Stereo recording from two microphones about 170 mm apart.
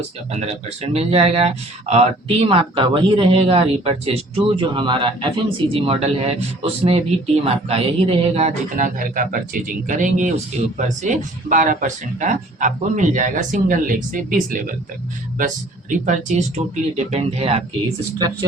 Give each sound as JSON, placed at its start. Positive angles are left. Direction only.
{"t": 0.3, "sound": "speech", "side_deg": -40}
{"t": 17.1, "sound": "speech", "side_deg": -40}